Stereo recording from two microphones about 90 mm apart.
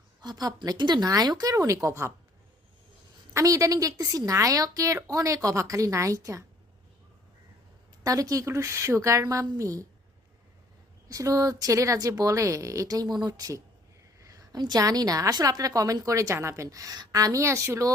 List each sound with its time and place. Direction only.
0.2 s a woman's voice: 45° right (ahead or behind)
3.3 s a woman's voice: 40° right (ahead or behind)
8.0 s a woman's voice: 40° right (ahead or behind)
11.1 s a woman's voice: 40° right (ahead or behind)
14.2 s a sound: 40° right (ahead or behind)
14.6 s a woman's voice: 45° right (ahead or behind)